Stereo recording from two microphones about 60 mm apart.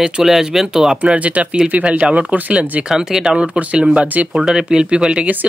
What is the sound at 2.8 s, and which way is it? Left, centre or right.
Speech, centre.